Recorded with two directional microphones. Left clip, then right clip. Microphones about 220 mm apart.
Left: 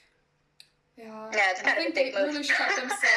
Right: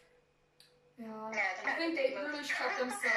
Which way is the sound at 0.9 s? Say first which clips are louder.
Left 9 dB; 55° left (ahead or behind).